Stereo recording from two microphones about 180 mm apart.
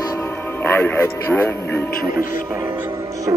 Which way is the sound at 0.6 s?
10° left (ahead or behind).